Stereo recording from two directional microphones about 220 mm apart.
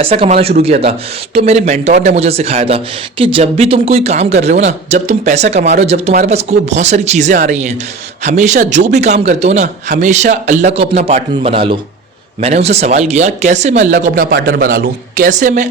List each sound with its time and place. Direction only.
0.0 s speech: 25° right (ahead or behind)
14.0 s speech: 40° right (ahead or behind)